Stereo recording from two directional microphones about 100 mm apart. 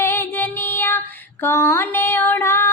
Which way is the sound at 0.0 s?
25° left (ahead or behind).